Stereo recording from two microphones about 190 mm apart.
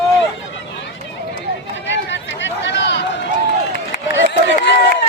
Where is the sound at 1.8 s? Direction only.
75° left (ahead or behind).